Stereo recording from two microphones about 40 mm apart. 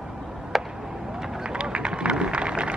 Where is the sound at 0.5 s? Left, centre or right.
Centre.